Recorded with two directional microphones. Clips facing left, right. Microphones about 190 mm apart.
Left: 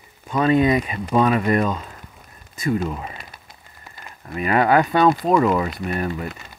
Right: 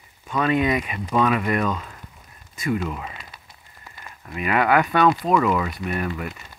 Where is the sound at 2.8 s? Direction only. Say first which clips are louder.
Left 3 dB; 30° left (ahead or behind).